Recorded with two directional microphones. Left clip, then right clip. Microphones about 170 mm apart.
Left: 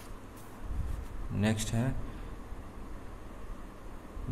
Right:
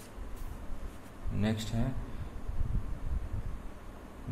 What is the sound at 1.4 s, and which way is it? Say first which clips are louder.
Speech: left 2 dB; 15° left (ahead or behind).